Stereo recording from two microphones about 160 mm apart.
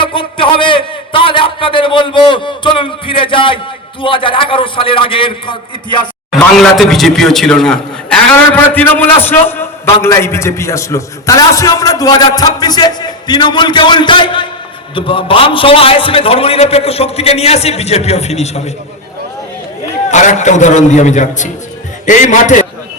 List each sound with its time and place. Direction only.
0.0 s a sound: 35° left (ahead or behind)
4.0 s a man's voice: 30° left (ahead or behind)
6.3 s a man's voice: centre (ahead or behind); by 18.7 s 45° left (ahead or behind)
20.1 s a man's voice: 50° left (ahead or behind)